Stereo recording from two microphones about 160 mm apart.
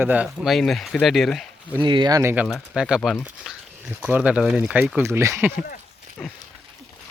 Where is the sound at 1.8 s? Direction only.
30° right (ahead or behind).